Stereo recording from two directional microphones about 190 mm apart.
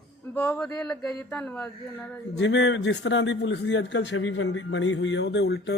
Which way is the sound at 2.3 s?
70° left (ahead or behind).